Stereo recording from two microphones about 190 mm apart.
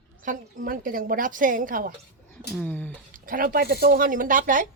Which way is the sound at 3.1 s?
45° right (ahead or behind).